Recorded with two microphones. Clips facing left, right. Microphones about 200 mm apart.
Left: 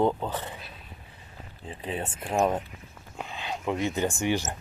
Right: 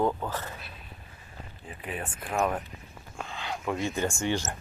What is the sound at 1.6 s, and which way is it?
Speech, 25° left (ahead or behind).